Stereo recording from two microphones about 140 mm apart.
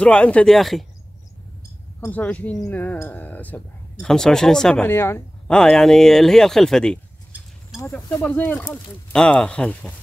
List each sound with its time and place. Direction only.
0.0 s speech: 10° left (ahead or behind)
2.0 s speech: 10° left (ahead or behind)
4.8 s speech: 15° left (ahead or behind)
5.5 s speech: 5° left (ahead or behind)
7.8 s speech: 20° left (ahead or behind)
8.2 s speech: 10° left (ahead or behind)